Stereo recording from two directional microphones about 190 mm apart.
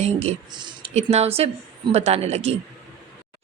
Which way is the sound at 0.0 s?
35° right (ahead or behind).